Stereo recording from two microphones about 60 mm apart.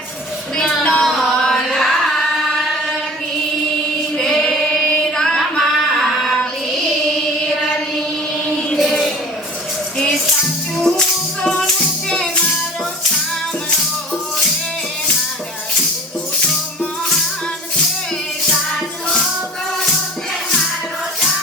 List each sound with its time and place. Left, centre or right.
0.6 s child singing: centre
1.0 s chant: centre
4.2 s singing: centre
8.4 s chant: centre
10.8 s music: centre